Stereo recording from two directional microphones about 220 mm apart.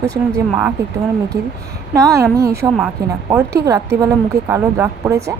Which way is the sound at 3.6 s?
15° right (ahead or behind).